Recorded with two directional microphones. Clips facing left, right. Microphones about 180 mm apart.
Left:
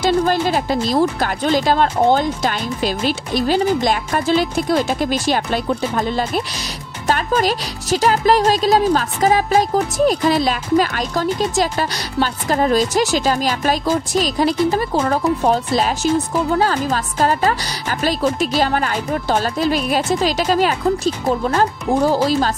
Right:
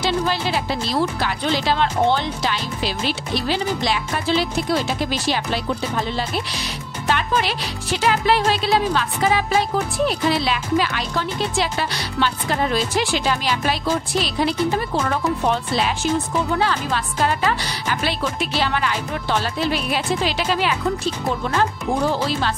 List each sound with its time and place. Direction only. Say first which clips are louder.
0.0 s speech: left 5 dB; 45° left (ahead or behind)
7.1 s music: left 4 dB; 40° left (ahead or behind)